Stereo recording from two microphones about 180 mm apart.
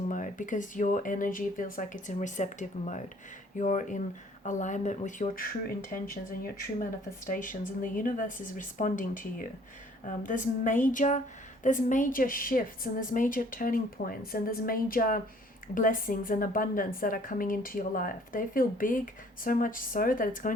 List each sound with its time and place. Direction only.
0.1 s a woman's voice: 45° left (ahead or behind)
7.3 s a woman's voice: 50° left (ahead or behind)